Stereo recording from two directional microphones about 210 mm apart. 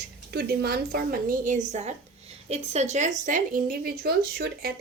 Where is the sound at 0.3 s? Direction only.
50° right (ahead or behind).